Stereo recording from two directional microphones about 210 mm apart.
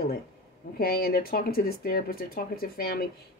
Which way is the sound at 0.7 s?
45° left (ahead or behind).